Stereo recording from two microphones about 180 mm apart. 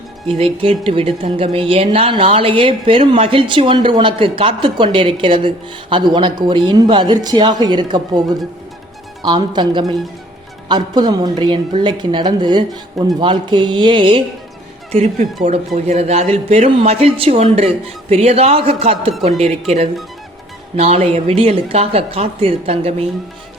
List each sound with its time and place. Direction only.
0.3 s speech: 30° right (ahead or behind)
14.9 s speech: 40° right (ahead or behind)